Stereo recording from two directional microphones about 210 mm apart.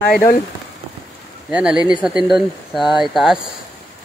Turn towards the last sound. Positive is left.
turn(degrees=0)  # may be behind; listen again after turning